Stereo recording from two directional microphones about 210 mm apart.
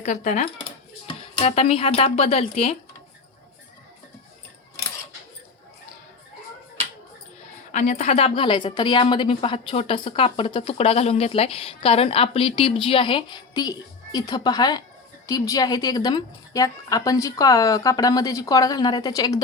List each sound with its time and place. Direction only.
0.0 s speech: 35° left (ahead or behind)
7.7 s a woman's voice: 35° left (ahead or behind); by 19.4 s 20° left (ahead or behind)